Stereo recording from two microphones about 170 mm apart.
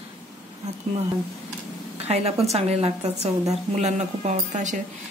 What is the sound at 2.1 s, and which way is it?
A woman's voice, 40° right (ahead or behind).